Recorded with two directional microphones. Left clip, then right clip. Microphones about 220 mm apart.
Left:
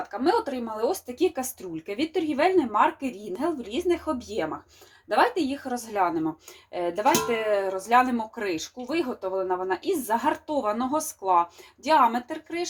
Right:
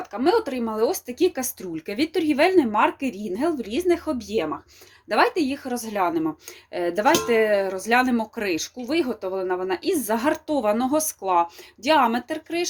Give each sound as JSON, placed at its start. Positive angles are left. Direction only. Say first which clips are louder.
{"t": 0.1, "sound": "speech", "louder": "right 4 dB", "side_deg": -35}